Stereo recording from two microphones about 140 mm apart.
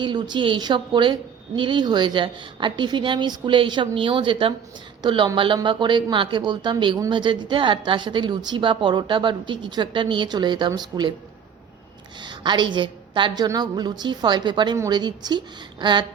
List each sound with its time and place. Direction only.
0.0 s a woman's voice: 35° right (ahead or behind)
12.2 s a woman's voice: 35° right (ahead or behind)